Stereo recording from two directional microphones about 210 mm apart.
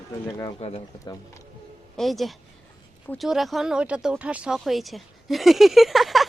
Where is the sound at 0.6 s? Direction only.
30° left (ahead or behind).